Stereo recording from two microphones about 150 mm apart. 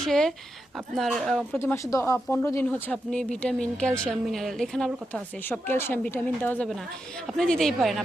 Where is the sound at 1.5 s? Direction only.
20° left (ahead or behind).